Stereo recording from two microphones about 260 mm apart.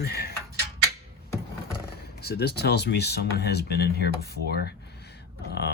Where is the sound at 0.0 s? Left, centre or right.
Left.